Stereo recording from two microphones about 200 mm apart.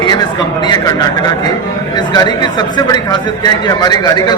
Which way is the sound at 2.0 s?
20° left (ahead or behind).